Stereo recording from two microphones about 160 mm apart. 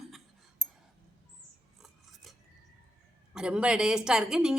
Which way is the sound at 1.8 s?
Centre (ahead or behind).